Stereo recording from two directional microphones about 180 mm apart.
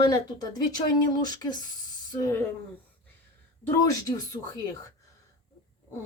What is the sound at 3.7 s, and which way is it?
Speech, 15° left (ahead or behind).